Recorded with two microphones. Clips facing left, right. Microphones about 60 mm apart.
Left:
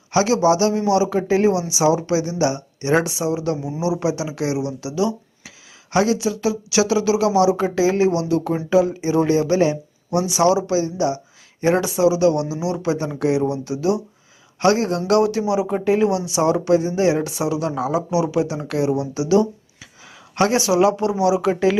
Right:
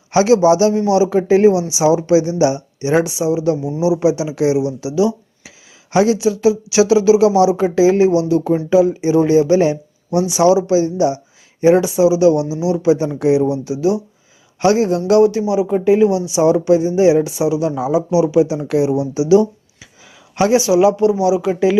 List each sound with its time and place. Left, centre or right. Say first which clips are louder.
0.1 s speech: right 5 dB; right
9.6 s a sound: right 3 dB; right
10.3 s speech: right 5 dB; centre
11.6 s speech: right 5 dB; centre